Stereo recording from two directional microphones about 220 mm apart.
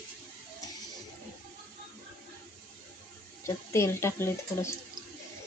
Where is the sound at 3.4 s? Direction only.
10° left (ahead or behind).